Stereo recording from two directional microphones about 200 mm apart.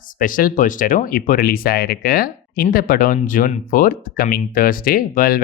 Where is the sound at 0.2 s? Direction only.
45° left (ahead or behind).